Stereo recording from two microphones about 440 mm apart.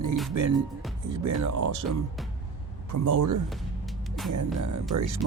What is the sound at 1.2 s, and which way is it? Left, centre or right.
Speech, right.